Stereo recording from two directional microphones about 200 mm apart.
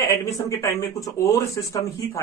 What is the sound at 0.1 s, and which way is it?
Speech, 15° left (ahead or behind).